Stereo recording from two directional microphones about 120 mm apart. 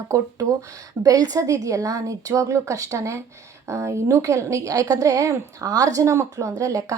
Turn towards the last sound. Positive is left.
turn(degrees=-30)  # may be behind; listen again after turning